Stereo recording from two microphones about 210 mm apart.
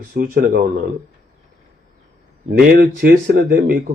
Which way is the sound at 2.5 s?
50° right (ahead or behind).